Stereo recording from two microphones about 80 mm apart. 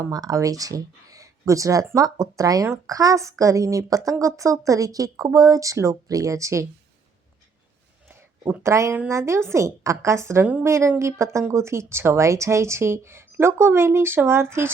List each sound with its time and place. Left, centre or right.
0.1 s speech: right
8.6 s speech: right